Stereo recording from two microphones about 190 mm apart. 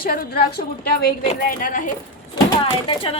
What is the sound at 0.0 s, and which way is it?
A woman's voice, 50° left (ahead or behind).